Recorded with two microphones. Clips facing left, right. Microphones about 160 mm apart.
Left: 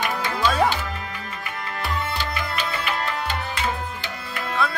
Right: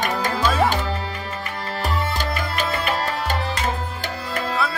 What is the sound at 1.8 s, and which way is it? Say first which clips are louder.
Music: right 3 dB; 45° right (ahead or behind).